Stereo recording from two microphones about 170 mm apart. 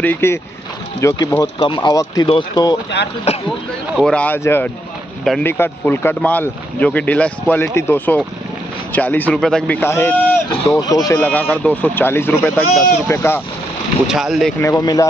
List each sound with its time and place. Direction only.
0.0 s speech: 15° left (ahead or behind)
3.9 s speech: 5° left (ahead or behind); by 11.1 s 20° left (ahead or behind)
11.1 s speech: 10° left (ahead or behind)
14.0 s speech: 5° right (ahead or behind)
14.6 s speech: 20° left (ahead or behind)